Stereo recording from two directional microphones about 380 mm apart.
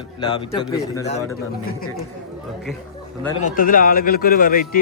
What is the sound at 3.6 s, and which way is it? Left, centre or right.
Speech, left.